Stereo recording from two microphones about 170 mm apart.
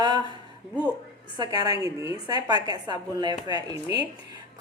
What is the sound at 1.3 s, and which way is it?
A woman's voice, 25° right (ahead or behind).